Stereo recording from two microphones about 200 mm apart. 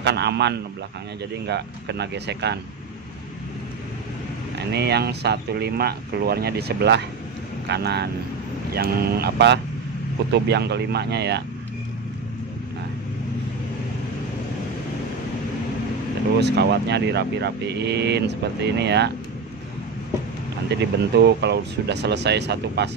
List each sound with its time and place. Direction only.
0.0 s speech: 55° right (ahead or behind)
4.6 s speech: 55° right (ahead or behind)
16.3 s speech: 55° right (ahead or behind)
20.7 s speech: 55° right (ahead or behind)